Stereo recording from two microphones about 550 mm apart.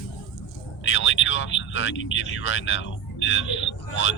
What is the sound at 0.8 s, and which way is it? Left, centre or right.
Speech, left.